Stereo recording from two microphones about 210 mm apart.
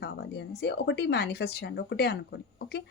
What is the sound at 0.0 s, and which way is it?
Speech, 50° left (ahead or behind).